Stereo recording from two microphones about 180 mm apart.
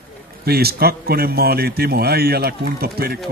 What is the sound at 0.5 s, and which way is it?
A man's voice, 60° right (ahead or behind).